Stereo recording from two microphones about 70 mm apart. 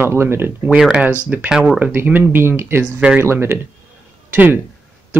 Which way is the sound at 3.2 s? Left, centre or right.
Right.